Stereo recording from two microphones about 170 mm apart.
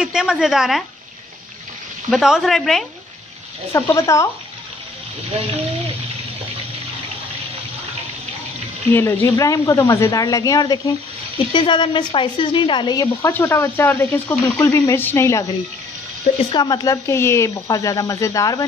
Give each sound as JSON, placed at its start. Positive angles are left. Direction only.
{"t": 0.0, "sound": "a woman's voice", "side_deg": -5}
{"t": 2.0, "sound": "a woman's voice", "side_deg": 0}
{"t": 3.7, "sound": "speech", "side_deg": 20}
{"t": 8.9, "sound": "a woman's voice", "side_deg": 15}
{"t": 16.5, "sound": "a woman's voice", "side_deg": 25}